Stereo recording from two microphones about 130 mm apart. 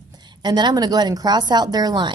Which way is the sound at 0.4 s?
35° right (ahead or behind).